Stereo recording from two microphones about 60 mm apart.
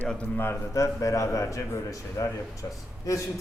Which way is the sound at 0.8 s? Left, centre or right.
Left.